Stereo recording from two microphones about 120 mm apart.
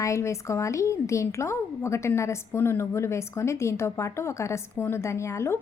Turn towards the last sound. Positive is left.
turn(degrees=20)  # may be behind; listen again after turning